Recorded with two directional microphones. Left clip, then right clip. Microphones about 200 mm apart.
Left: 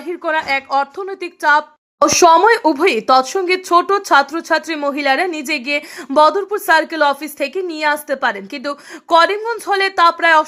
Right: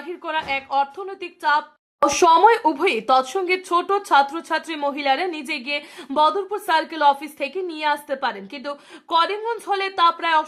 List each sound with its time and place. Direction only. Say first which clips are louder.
0.1 s a woman's voice: left 7 dB; 25° left (ahead or behind)
2.0 s speech: left 4 dB; 15° left (ahead or behind)